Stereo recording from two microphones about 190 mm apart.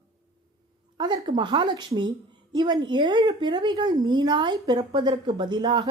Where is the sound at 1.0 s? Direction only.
25° right (ahead or behind).